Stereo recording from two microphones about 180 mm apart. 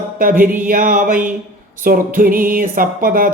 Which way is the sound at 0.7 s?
50° right (ahead or behind).